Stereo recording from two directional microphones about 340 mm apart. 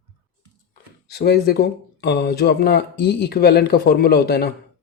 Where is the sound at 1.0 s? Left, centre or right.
Left.